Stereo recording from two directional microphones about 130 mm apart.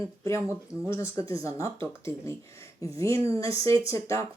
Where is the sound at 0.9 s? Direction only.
20° left (ahead or behind).